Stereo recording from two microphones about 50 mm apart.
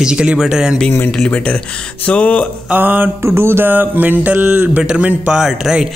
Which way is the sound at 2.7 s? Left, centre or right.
Right.